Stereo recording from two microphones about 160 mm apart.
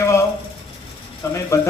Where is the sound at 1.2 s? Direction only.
15° left (ahead or behind).